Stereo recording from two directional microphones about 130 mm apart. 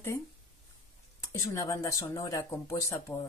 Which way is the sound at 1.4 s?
20° left (ahead or behind).